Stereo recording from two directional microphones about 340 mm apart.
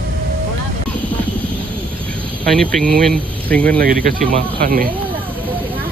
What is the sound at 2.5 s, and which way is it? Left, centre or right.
Speech, centre.